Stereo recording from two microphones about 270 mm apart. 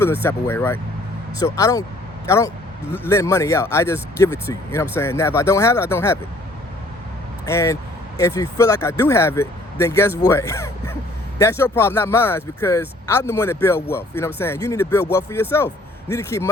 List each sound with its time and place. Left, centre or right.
0.0 s speech: centre
7.4 s speech: centre